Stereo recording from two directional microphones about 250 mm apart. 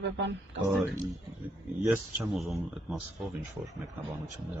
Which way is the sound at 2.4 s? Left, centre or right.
Centre.